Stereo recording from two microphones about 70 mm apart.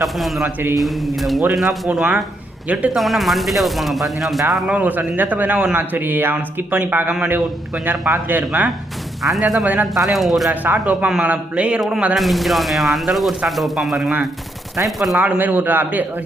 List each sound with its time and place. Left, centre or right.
0.0 s speech: centre
1.9 s a man's voice: centre
2.9 s speech: centre
4.7 s speech: right
9.2 s speech: centre
10.5 s a man's voice: right
12.1 s speech: centre
15.2 s speech: right